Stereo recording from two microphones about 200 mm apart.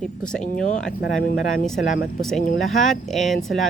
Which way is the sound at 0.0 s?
5° left (ahead or behind).